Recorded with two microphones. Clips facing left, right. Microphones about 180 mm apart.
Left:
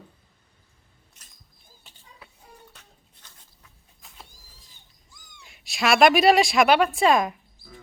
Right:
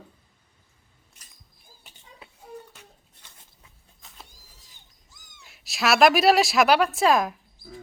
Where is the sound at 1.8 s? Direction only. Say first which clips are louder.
Right 2 dB; 20° right (ahead or behind).